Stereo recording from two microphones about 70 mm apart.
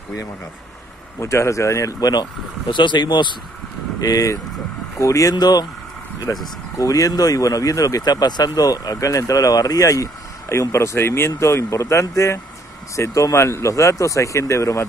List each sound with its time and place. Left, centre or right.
1.2 s speech: left
2.0 s speech: left
2.9 s speech: left
4.0 s speech: left
5.3 s speech: left
6.3 s speech: left
10.5 s speech: left